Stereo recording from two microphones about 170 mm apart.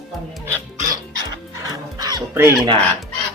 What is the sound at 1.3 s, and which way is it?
Music, 20° right (ahead or behind).